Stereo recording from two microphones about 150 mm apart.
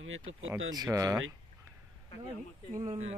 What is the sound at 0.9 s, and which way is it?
Speech, 20° right (ahead or behind).